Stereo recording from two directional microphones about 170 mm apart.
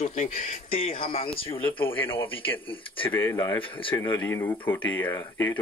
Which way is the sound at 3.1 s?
15° left (ahead or behind).